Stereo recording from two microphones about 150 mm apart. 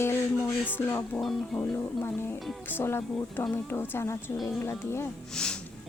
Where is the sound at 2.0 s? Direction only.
15° left (ahead or behind).